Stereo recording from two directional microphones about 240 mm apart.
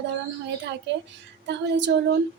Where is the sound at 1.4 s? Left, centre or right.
Right.